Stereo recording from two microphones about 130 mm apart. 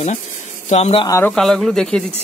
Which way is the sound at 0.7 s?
55° left (ahead or behind).